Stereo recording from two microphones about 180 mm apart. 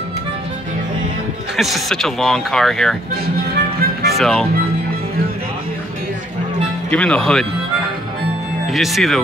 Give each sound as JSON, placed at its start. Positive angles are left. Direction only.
{"t": 1.6, "sound": "speech", "side_deg": 0}
{"t": 3.8, "sound": "music", "side_deg": -60}
{"t": 4.2, "sound": "speech", "side_deg": 5}
{"t": 6.9, "sound": "speech", "side_deg": 5}
{"t": 8.7, "sound": "speech", "side_deg": 0}